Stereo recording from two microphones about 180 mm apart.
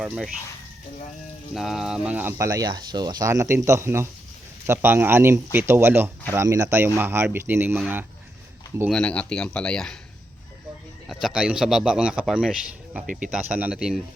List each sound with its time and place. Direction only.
0.0 s a man's voice: 5° right (ahead or behind)
1.5 s speech: centre (ahead or behind)
8.9 s a man's voice: 5° left (ahead or behind)
11.1 s a man's voice: 5° right (ahead or behind)
13.1 s speech: 45° right (ahead or behind)
13.3 s a man's voice: 5° right (ahead or behind)